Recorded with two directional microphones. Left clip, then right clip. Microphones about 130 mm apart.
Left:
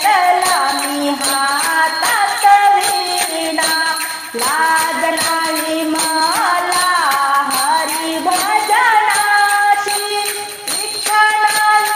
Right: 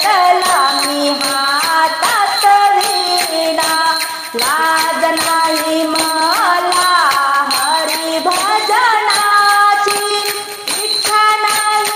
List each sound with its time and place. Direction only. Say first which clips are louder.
2.4 s music: left 1 dB; 20° right (ahead or behind)